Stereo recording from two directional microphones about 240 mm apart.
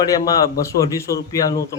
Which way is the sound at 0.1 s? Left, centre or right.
Centre.